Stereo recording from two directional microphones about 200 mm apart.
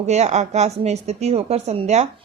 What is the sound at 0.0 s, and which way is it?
A woman's voice, 35° right (ahead or behind).